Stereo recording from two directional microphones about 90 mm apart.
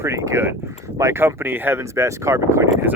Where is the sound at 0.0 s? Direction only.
30° right (ahead or behind).